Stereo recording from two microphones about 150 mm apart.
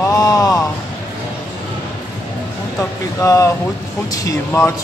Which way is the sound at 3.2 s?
20° left (ahead or behind).